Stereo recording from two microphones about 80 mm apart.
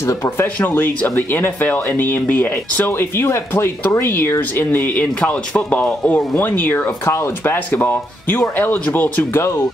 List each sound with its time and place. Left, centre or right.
0.0 s speech: left
5.2 s speech: centre
7.1 s speech: left
9.4 s speech: left